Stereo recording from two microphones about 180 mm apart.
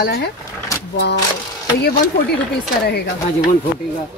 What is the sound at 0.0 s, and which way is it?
Speech, 65° left (ahead or behind).